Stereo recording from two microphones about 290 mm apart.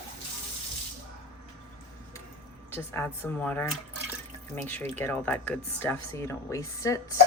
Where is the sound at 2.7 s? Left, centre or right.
Centre.